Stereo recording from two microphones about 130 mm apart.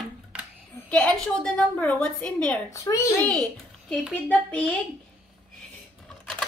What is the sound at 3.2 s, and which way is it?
A child's voice, 5° left (ahead or behind).